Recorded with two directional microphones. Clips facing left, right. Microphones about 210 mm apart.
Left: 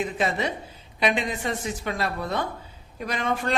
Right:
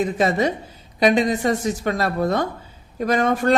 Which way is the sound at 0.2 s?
40° right (ahead or behind).